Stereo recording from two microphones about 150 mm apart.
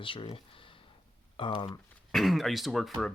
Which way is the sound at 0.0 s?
35° left (ahead or behind).